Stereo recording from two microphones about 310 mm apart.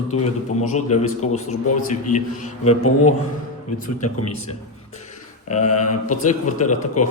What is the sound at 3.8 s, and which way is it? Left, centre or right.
Speech, left.